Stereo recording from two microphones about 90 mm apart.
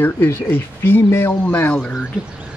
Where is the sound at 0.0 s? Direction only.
20° left (ahead or behind).